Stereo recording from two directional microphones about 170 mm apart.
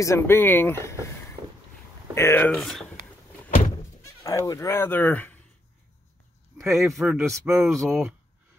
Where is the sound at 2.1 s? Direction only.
15° left (ahead or behind).